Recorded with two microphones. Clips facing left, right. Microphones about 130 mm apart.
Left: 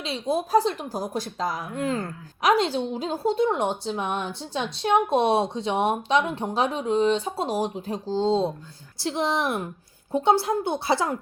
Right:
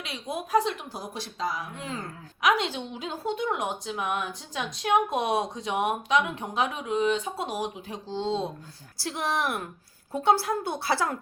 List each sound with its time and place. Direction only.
0.0 s speech: 30° left (ahead or behind); by 2.0 s 50° left (ahead or behind)
2.4 s a woman's voice: 35° left (ahead or behind); by 11.2 s 20° left (ahead or behind)